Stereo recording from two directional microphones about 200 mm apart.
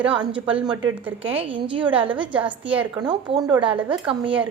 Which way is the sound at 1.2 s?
25° right (ahead or behind).